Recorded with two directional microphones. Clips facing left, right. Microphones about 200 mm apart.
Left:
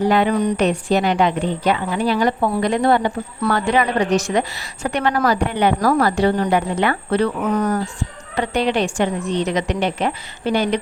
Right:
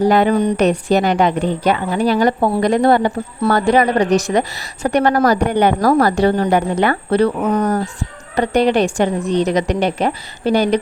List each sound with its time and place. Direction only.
0.0 s a woman's voice: 40° right (ahead or behind)